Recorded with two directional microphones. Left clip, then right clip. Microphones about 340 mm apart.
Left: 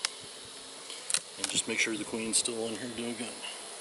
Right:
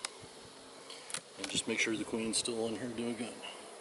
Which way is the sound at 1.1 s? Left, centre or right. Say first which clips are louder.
Left 5 dB; centre.